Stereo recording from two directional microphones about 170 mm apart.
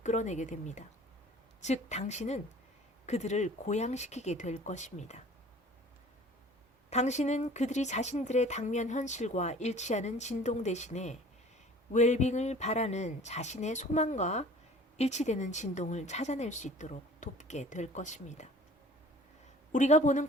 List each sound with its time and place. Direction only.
0.0 s a woman's voice: 45° left (ahead or behind)
6.9 s speech: 40° left (ahead or behind)
19.7 s speech: 45° left (ahead or behind)